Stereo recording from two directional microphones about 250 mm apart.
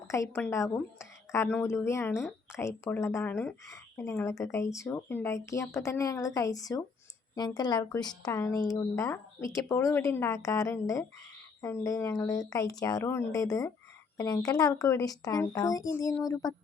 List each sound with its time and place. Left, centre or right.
0.1 s a woman's voice: centre